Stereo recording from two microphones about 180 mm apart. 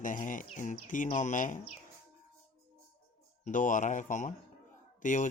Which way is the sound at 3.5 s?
45° left (ahead or behind).